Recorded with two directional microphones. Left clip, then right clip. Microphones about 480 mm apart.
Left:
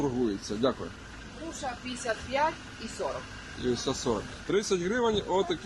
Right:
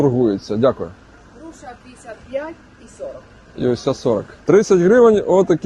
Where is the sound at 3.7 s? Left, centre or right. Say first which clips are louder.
Right 11 dB; right.